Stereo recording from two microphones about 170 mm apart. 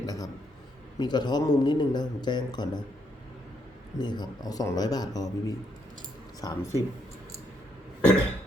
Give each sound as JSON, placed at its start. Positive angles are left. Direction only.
{"t": 0.0, "sound": "a sound", "side_deg": 20}
{"t": 0.9, "sound": "a man's voice", "side_deg": 25}
{"t": 3.9, "sound": "a man's voice", "side_deg": 25}